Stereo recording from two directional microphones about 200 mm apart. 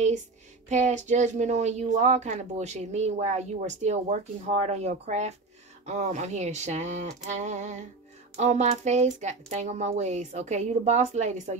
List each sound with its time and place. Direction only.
0.7 s speech: 35° right (ahead or behind)